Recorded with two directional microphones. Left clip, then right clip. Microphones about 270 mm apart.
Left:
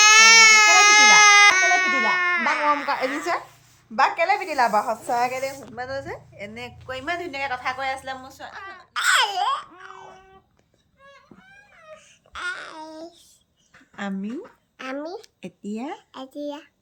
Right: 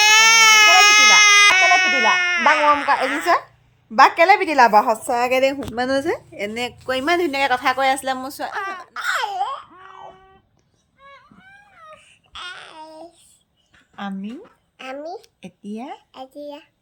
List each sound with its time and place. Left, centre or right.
0.0 s baby cry: centre
3.0 s a sound: centre
3.9 s a woman's voice: right
6.5 s a woman's voice: right
8.9 s baby cry: centre
12.3 s babbling: centre
13.9 s speech: centre